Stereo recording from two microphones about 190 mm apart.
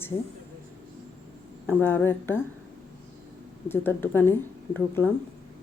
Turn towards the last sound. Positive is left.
turn(degrees=10)  # may be behind; listen again after turning